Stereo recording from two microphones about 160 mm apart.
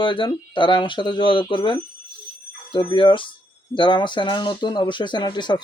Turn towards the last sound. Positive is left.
turn(degrees=30)  # may be behind; listen again after turning